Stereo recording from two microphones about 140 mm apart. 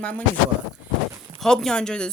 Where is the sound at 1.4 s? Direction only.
5° left (ahead or behind).